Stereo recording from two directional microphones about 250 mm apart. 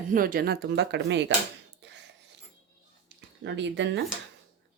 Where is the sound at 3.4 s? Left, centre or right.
Right.